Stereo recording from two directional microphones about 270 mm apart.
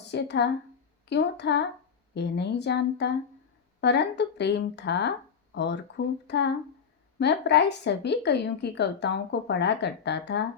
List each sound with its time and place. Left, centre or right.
0.1 s a woman's voice: left